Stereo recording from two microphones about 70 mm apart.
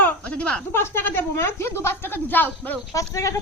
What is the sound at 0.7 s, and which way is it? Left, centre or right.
A woman's voice, left.